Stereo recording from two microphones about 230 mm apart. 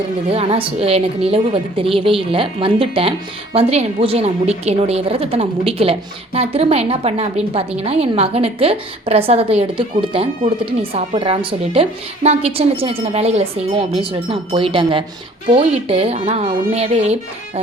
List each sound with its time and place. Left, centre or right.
0.3 s a woman's voice: right